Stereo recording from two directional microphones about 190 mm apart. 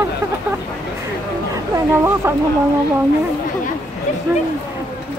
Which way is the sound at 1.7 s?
15° right (ahead or behind).